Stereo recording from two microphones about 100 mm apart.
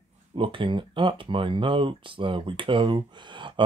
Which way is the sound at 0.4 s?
60° right (ahead or behind).